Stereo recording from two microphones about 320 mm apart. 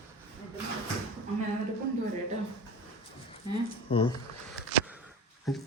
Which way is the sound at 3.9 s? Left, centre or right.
Centre.